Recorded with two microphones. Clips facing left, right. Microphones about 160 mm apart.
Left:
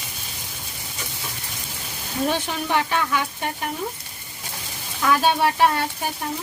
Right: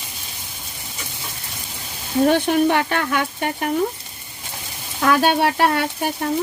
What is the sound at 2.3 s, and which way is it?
Speech, 60° right (ahead or behind).